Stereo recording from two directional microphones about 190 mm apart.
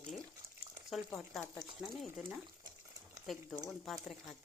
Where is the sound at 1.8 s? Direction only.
Centre (ahead or behind).